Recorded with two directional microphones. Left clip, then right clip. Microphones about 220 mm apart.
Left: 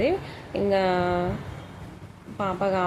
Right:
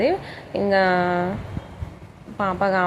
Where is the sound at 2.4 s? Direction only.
5° right (ahead or behind).